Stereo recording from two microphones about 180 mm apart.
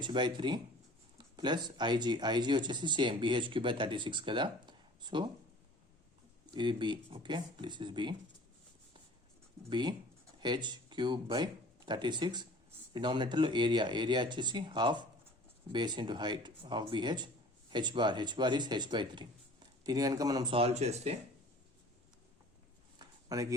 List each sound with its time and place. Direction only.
0.0 s speech: 25° right (ahead or behind)
6.5 s speech: 25° right (ahead or behind)
9.6 s speech: 25° right (ahead or behind)
23.0 s a sound: 20° right (ahead or behind)